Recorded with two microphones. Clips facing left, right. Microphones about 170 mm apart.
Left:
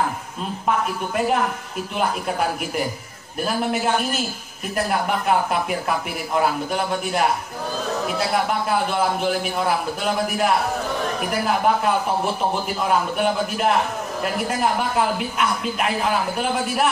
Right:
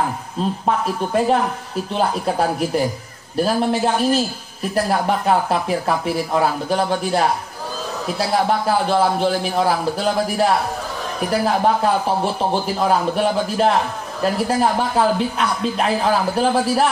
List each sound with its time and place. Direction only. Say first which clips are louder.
0.7 s speech: even; 30° right (ahead or behind)
8.5 s speech: right 4 dB; 30° right (ahead or behind)